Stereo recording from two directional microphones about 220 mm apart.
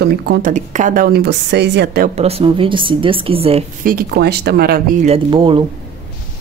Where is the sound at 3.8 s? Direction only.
45° right (ahead or behind).